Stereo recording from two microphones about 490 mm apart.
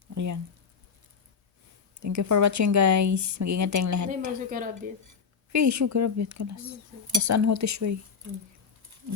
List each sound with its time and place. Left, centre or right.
0.1 s a sound: right
2.0 s speech: right
4.4 s speech: centre
5.0 s speech: right